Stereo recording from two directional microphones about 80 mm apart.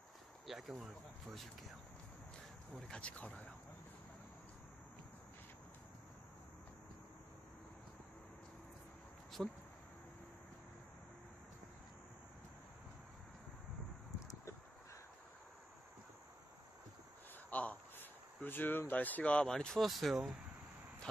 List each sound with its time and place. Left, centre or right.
0.5 s speech: centre
2.9 s speech: centre
9.4 s speech: centre
17.5 s speech: centre